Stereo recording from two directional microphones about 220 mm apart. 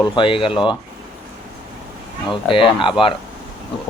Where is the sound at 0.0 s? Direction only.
25° left (ahead or behind).